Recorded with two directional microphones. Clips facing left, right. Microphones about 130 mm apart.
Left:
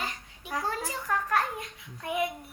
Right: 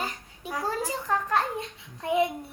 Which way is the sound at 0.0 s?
35° right (ahead or behind).